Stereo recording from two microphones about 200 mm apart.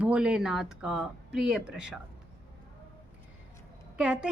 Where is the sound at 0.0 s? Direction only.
5° right (ahead or behind).